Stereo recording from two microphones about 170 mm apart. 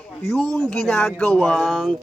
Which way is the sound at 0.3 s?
Centre (ahead or behind).